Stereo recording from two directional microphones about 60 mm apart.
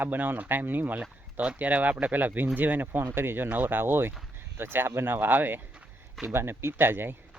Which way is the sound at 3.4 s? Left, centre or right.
Right.